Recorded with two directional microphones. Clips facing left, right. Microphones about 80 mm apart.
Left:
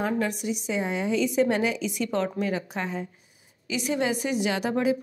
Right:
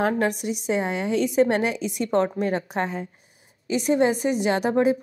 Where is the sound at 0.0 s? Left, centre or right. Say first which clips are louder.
Right 4 dB; right.